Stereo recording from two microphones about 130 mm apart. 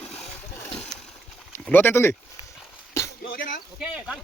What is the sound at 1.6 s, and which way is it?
Speech, 15° left (ahead or behind).